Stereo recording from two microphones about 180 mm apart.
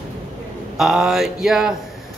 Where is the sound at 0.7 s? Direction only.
Centre (ahead or behind).